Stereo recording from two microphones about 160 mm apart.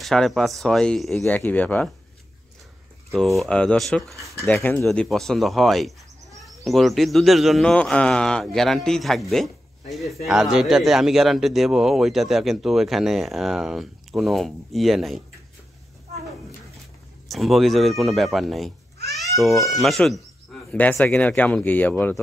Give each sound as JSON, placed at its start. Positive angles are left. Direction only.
{"t": 0.0, "sound": "speech", "side_deg": 0}
{"t": 3.3, "sound": "speech", "side_deg": 5}
{"t": 4.4, "sound": "speech", "side_deg": 15}
{"t": 4.8, "sound": "speech", "side_deg": 0}
{"t": 17.3, "sound": "speech", "side_deg": 0}
{"t": 19.1, "sound": "baby cry", "side_deg": 0}
{"t": 19.6, "sound": "speech", "side_deg": 0}